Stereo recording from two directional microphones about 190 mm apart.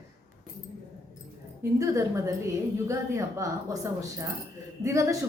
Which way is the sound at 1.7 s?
15° right (ahead or behind).